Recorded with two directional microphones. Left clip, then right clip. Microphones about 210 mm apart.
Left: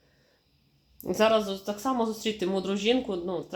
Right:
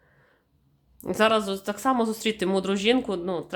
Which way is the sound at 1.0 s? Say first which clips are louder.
Right 1 dB; 15° right (ahead or behind).